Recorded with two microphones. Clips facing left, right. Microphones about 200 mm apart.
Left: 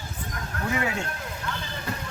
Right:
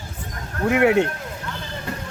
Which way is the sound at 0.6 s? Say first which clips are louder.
Right 12 dB; 65° right (ahead or behind).